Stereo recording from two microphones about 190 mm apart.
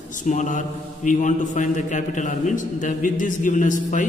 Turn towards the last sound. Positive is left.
turn(degrees=40)  # may be behind; listen again after turning